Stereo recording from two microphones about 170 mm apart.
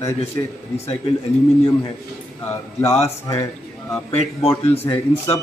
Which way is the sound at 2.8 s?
20° left (ahead or behind).